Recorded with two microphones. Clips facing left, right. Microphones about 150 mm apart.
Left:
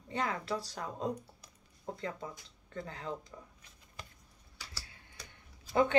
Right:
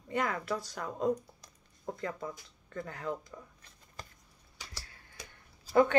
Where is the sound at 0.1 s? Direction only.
25° left (ahead or behind).